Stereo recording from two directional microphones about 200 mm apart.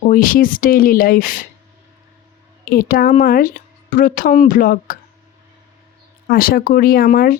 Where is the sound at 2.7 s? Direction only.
50° left (ahead or behind).